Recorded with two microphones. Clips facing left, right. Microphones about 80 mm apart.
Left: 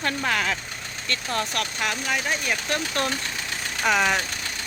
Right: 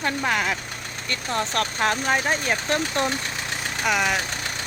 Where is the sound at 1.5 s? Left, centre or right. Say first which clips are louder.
Right 4 dB; right; by 3.2 s centre.